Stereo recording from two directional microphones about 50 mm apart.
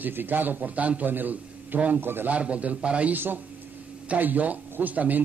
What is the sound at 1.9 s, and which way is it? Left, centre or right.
Speech, right.